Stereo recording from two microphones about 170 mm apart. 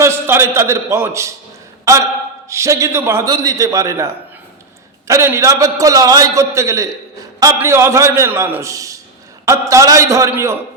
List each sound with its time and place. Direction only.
0.0 s a man's voice: 15° right (ahead or behind)